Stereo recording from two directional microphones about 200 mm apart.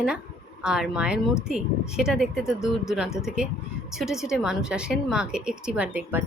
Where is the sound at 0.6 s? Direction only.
5° right (ahead or behind).